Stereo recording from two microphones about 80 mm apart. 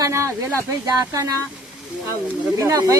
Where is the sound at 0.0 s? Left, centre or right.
Right.